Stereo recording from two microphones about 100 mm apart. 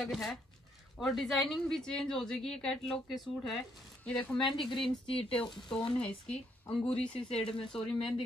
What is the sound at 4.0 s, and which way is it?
Speech, 10° left (ahead or behind).